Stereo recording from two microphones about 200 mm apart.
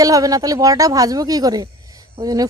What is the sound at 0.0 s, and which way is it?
Speech, 15° right (ahead or behind).